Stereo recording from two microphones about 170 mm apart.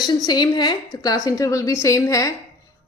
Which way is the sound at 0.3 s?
25° left (ahead or behind).